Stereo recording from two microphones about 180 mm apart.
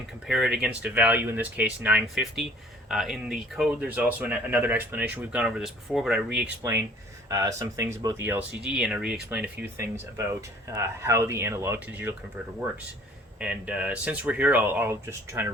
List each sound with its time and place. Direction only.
0.3 s speech: centre (ahead or behind)
6.6 s speech: 15° right (ahead or behind)
13.4 s speech: 5° right (ahead or behind)